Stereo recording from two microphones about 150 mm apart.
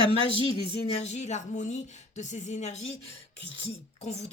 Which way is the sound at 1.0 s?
50° left (ahead or behind).